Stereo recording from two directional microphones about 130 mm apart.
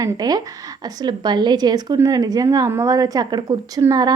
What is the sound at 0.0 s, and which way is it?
A woman's voice, 30° right (ahead or behind).